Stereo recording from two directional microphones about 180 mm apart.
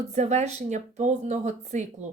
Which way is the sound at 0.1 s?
40° right (ahead or behind).